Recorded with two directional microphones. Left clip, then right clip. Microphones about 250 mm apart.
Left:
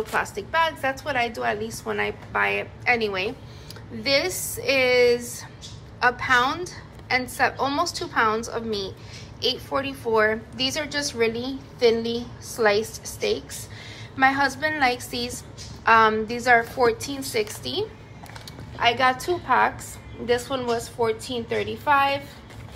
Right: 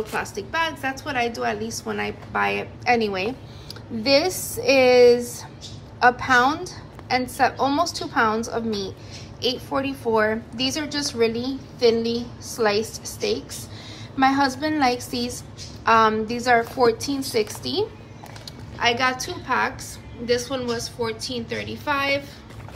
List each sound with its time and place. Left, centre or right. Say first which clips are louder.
0.1 s a woman's voice: left 2 dB; centre
18.8 s a woman's voice: left 1 dB; centre